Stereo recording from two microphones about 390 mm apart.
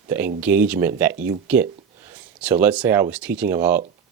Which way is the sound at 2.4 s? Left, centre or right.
Centre.